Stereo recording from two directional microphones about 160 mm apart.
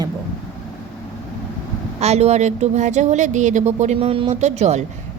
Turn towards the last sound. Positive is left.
turn(degrees=-45)  # may be behind; listen again after turning